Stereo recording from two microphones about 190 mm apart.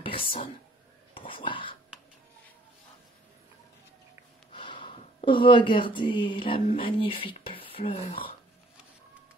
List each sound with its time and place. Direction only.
0.0 s a sound: 25° left (ahead or behind)
1.1 s speech: 25° left (ahead or behind)
4.5 s speech: 25° left (ahead or behind)